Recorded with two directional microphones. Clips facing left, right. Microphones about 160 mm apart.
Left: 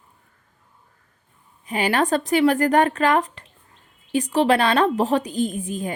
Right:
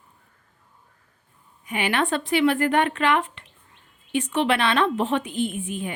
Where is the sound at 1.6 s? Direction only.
35° left (ahead or behind).